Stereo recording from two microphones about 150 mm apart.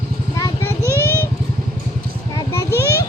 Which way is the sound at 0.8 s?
20° right (ahead or behind).